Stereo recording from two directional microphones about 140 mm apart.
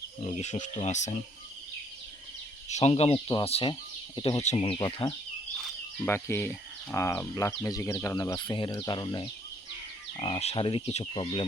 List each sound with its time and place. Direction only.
0.2 s speech: 50° left (ahead or behind)
2.6 s speech: 50° left (ahead or behind); by 4.4 s 35° left (ahead or behind)
4.4 s speech: 50° left (ahead or behind)
4.6 s speech: 35° left (ahead or behind)
6.1 s speech: 15° left (ahead or behind); by 11.4 s 40° left (ahead or behind)